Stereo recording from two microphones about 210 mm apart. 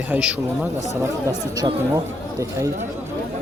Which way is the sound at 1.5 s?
15° right (ahead or behind).